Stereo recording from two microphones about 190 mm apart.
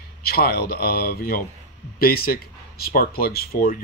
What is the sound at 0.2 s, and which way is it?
Speech, 55° left (ahead or behind).